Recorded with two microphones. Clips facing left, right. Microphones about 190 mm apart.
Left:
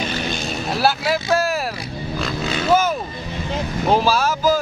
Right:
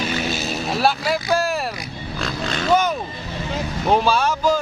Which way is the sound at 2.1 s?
5° left (ahead or behind).